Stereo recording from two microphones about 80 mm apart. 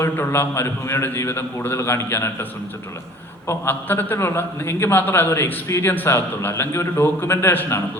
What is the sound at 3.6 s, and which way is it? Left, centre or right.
A man's voice, left.